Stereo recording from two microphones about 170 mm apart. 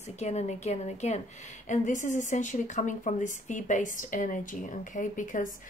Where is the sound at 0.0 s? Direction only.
40° left (ahead or behind).